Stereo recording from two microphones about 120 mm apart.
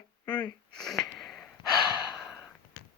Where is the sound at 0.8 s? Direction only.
5° left (ahead or behind).